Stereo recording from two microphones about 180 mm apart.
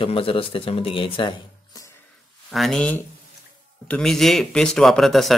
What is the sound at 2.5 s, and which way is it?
Speech, centre (ahead or behind).